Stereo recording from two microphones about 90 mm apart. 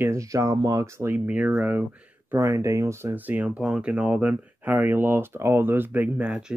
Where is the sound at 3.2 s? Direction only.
20° right (ahead or behind).